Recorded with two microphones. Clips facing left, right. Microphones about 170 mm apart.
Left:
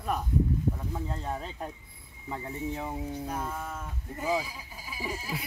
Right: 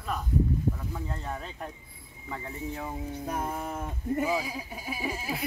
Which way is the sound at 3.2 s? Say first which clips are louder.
Right 2 dB; 60° right (ahead or behind).